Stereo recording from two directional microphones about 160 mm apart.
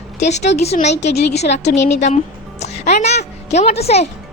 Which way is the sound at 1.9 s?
45° left (ahead or behind).